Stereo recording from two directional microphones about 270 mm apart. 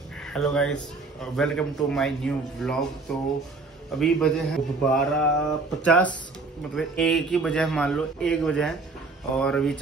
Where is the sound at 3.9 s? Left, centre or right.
Centre.